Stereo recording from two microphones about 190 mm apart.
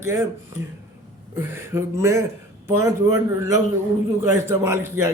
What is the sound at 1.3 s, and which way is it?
Speech, 15° right (ahead or behind).